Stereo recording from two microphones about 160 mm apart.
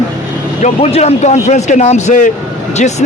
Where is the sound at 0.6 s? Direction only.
40° left (ahead or behind).